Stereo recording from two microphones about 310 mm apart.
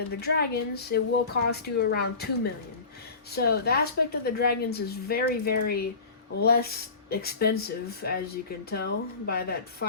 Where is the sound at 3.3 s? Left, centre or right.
Left.